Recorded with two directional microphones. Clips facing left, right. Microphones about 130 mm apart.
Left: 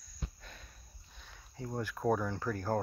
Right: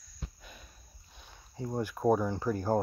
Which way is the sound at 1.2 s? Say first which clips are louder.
Right 4 dB; 20° right (ahead or behind).